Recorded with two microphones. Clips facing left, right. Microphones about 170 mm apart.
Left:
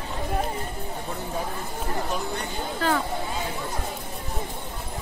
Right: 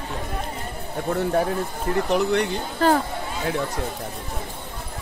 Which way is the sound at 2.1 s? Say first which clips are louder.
Right 9 dB; 70° right (ahead or behind).